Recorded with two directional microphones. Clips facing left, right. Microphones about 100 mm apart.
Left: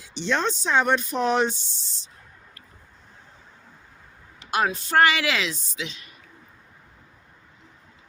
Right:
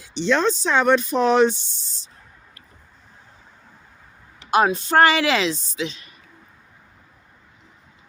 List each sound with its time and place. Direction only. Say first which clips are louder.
0.1 s speech: right 5 dB; 90° right
4.4 s speech: right 6 dB; 30° right (ahead or behind)